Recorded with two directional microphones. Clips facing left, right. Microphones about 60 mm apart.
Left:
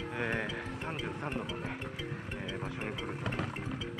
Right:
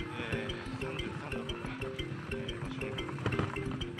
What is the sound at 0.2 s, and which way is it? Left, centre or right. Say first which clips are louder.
Music: left 4 dB; left.